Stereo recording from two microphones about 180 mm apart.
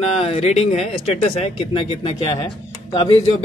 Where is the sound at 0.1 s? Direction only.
35° left (ahead or behind).